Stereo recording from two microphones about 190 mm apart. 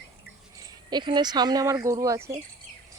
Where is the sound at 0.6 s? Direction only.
20° right (ahead or behind).